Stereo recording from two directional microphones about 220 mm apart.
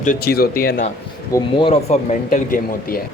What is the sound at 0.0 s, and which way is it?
Speech, 40° left (ahead or behind).